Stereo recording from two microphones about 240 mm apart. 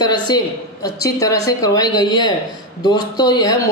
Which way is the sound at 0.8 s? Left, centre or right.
Centre.